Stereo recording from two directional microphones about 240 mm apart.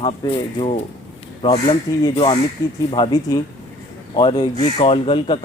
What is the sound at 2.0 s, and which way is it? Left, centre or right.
Speech, centre.